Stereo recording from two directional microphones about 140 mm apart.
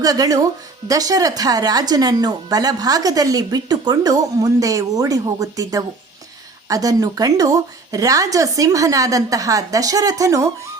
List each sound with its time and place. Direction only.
0.0 s speech: 25° right (ahead or behind)